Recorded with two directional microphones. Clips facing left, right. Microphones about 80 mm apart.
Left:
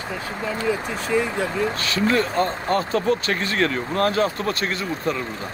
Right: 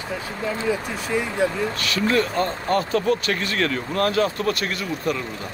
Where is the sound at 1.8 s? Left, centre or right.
Left.